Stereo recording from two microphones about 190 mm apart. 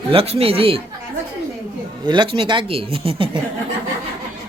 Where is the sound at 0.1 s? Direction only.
30° right (ahead or behind).